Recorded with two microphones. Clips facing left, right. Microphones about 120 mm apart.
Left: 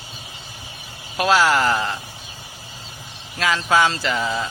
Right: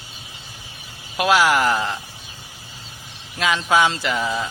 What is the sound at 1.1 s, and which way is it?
Speech, 15° right (ahead or behind).